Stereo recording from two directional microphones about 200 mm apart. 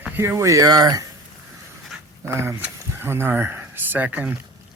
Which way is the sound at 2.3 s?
15° right (ahead or behind).